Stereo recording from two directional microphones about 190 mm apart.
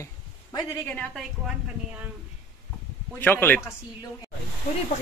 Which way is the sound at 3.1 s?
10° left (ahead or behind).